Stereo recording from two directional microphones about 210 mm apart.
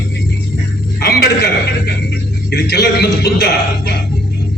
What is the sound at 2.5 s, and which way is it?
A man's voice, 50° left (ahead or behind).